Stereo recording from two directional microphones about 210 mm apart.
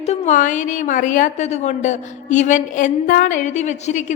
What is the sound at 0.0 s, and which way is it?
A woman's voice, 30° left (ahead or behind).